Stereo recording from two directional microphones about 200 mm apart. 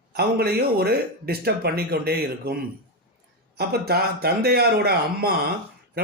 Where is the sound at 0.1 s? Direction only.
50° right (ahead or behind).